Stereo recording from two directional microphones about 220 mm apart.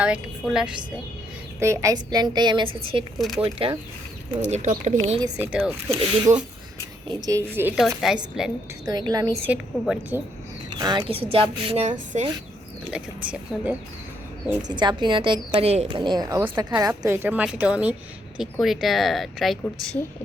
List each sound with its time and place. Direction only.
0.0 s a woman's voice: 5° right (ahead or behind); by 2.6 s 20° right (ahead or behind)
3.2 s a woman's voice: centre (ahead or behind)
3.4 s a woman's voice: 25° right (ahead or behind)
5.2 s a woman's voice: 5° right (ahead or behind)
5.9 s speech: 30° right (ahead or behind)
7.1 s a woman's voice: 15° right (ahead or behind)
8.9 s a woman's voice: 15° right (ahead or behind)
9.8 s a woman's voice: 5° right (ahead or behind)
10.8 s a woman's voice: 20° right (ahead or behind)
12.9 s a woman's voice: 5° right (ahead or behind)
14.7 s a woman's voice: 20° right (ahead or behind); by 20.1 s 5° left (ahead or behind)